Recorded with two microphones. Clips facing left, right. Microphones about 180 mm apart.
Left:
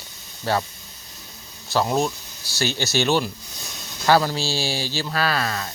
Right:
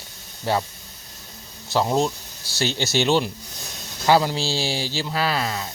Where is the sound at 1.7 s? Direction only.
20° right (ahead or behind).